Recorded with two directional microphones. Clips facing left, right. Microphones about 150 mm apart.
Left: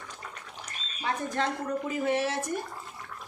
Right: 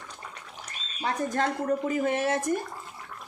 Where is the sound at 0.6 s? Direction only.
40° right (ahead or behind).